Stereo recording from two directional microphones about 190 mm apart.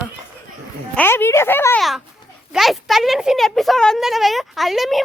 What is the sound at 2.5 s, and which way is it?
A woman's voice, centre (ahead or behind).